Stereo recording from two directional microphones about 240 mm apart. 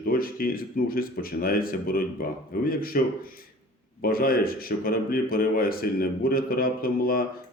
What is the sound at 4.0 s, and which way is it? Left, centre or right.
Speech, left.